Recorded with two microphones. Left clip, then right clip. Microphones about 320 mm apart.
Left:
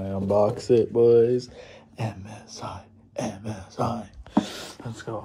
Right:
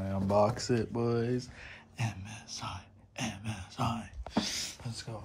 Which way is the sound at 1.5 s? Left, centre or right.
Right.